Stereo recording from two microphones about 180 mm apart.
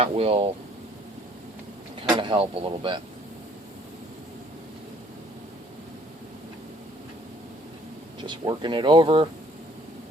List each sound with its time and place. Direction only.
0.0 s speech: 35° right (ahead or behind)
2.1 s speech: 30° right (ahead or behind)
8.3 s speech: 25° right (ahead or behind)